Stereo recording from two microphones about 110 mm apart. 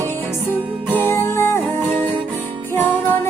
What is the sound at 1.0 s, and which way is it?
Music, 20° left (ahead or behind).